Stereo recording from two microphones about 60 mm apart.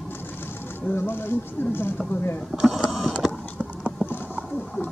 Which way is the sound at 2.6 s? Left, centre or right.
Centre.